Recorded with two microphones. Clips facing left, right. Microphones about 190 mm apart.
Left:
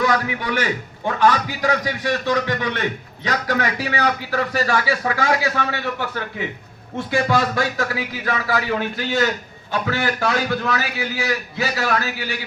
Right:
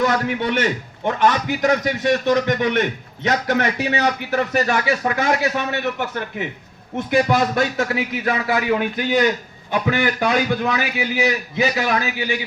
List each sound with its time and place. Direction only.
0.0 s a man's voice: 25° right (ahead or behind)